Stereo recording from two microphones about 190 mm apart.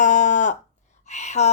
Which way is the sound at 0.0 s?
40° left (ahead or behind).